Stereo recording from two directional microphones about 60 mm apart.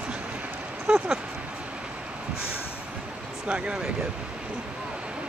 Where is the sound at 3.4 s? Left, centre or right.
Centre.